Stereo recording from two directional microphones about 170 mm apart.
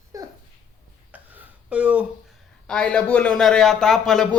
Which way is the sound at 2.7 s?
5° left (ahead or behind).